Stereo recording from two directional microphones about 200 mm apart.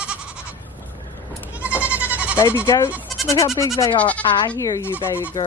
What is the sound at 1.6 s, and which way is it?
Goat, 5° right (ahead or behind).